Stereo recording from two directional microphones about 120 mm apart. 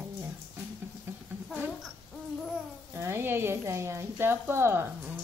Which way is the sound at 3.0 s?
20° right (ahead or behind).